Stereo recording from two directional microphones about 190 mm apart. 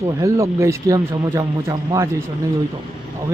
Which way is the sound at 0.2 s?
15° right (ahead or behind).